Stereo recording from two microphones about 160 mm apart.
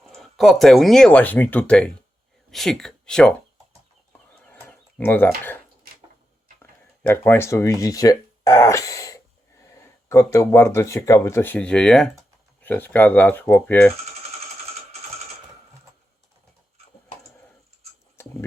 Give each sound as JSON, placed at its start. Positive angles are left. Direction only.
{"t": 0.0, "sound": "speech", "side_deg": 0}
{"t": 4.4, "sound": "bird", "side_deg": 10}
{"t": 6.6, "sound": "speech", "side_deg": 15}
{"t": 18.2, "sound": "a sound", "side_deg": 15}